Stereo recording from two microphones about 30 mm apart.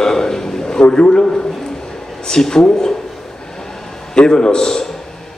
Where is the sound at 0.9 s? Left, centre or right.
Left.